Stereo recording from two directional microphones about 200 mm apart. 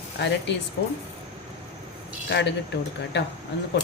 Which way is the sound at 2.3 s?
60° left (ahead or behind).